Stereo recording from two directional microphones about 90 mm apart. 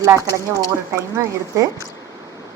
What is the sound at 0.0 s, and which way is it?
A woman's voice, 35° right (ahead or behind).